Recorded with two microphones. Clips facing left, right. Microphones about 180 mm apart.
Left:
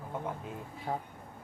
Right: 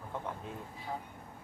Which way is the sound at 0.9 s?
55° left (ahead or behind).